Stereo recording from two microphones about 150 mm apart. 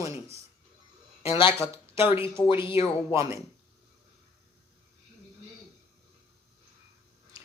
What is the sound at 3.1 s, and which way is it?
Speech, 20° right (ahead or behind).